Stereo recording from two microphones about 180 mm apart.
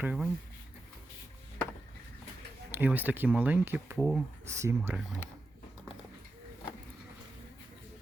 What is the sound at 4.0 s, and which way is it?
Speech, centre (ahead or behind).